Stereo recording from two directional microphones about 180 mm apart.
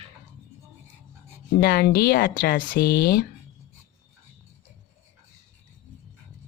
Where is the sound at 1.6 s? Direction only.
55° left (ahead or behind).